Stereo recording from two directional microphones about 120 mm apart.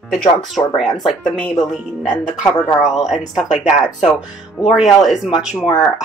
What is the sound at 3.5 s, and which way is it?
Speech, 75° left (ahead or behind).